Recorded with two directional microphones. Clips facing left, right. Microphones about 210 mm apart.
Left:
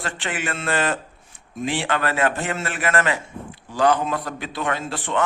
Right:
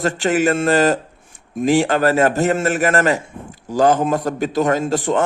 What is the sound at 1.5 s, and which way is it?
A man's voice, 40° right (ahead or behind).